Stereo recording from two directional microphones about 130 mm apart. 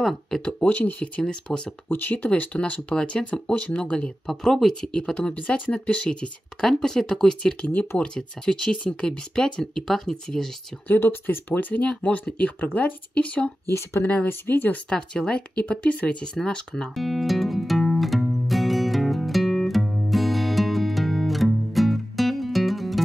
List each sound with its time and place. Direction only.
0.0 s speech: 5° left (ahead or behind)
10.9 s speech: 15° left (ahead or behind)
13.7 s speech: 20° left (ahead or behind)
14.1 s a sound: 15° left (ahead or behind)